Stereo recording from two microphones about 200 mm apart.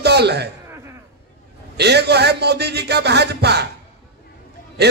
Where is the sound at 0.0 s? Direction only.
55° right (ahead or behind).